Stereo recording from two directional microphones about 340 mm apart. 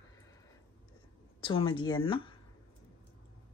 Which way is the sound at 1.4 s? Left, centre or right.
Centre.